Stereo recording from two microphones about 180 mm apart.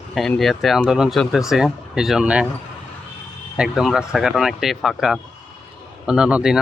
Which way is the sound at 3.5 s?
5° right (ahead or behind).